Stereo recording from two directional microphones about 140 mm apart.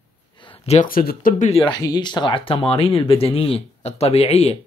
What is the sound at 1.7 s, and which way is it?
Speech, 30° left (ahead or behind).